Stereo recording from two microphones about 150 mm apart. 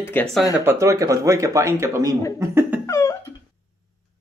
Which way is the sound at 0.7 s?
20° right (ahead or behind).